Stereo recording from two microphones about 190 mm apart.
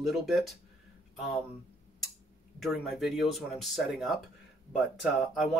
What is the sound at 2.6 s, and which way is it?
Speech, centre (ahead or behind).